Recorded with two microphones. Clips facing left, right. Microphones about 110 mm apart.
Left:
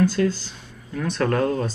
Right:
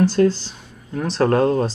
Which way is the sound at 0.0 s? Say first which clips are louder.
Right 4 dB; 30° right (ahead or behind).